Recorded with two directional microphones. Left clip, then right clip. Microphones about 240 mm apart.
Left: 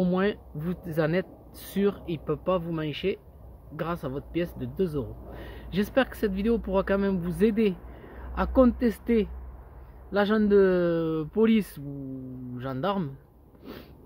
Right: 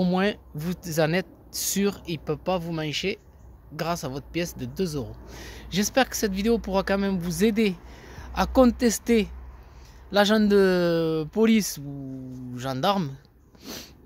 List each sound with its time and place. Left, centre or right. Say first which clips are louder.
0.0 s speech: right 2 dB; right